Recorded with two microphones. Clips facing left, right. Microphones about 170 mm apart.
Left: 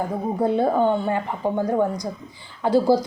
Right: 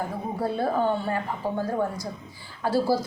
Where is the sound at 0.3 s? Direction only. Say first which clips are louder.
Left 6 dB; 20° left (ahead or behind).